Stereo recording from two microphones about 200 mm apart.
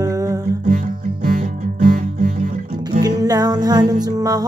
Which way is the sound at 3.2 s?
20° right (ahead or behind).